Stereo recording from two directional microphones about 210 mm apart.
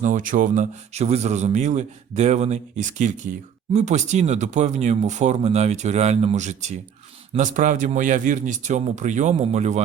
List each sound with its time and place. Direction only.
0.0 s speech: 40° right (ahead or behind)